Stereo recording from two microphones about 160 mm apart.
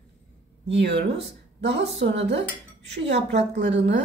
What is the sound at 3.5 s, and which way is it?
Speech, 90° right.